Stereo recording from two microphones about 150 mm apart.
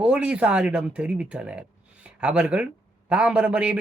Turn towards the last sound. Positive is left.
turn(degrees=-10)  # may be behind; listen again after turning